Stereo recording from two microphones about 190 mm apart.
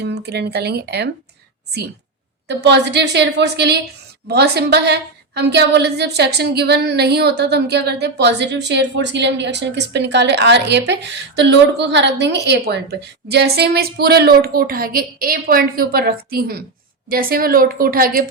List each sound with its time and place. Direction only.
0.0 s a woman's voice: 60° right (ahead or behind)
2.5 s a woman's voice: 60° right (ahead or behind)